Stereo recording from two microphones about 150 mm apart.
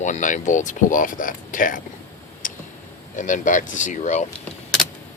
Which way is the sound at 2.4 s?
60° left (ahead or behind).